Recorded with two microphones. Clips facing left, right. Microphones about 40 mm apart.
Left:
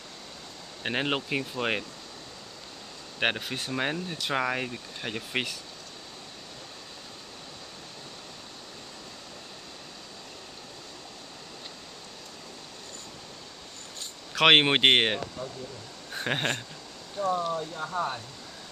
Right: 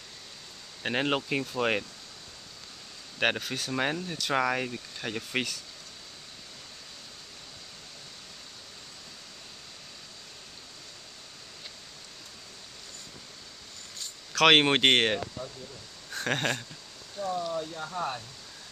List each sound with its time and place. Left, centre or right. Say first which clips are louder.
0.8 s speech: right 1 dB; centre
3.2 s speech: even; centre
3.7 s speech: right 1 dB; centre
14.3 s speech: left 1 dB; centre
17.2 s speech: left 4 dB; left
17.6 s speech: left 2 dB; centre